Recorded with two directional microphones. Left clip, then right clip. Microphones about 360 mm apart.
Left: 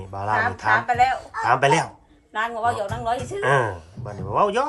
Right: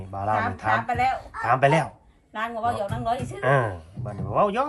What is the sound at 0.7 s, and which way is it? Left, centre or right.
Speech, left.